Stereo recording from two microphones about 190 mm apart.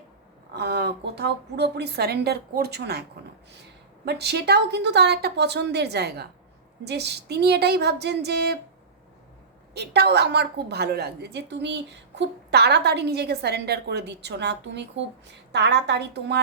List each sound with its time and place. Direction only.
0.5 s a woman's voice: 60° right (ahead or behind)
4.0 s a woman's voice: 60° right (ahead or behind)
9.7 s a woman's voice: 60° right (ahead or behind)